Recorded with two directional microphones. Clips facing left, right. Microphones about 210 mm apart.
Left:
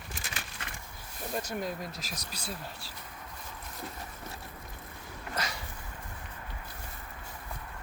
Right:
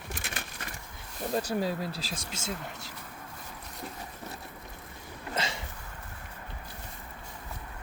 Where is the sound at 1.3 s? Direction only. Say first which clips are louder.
Right 5 dB; 30° right (ahead or behind).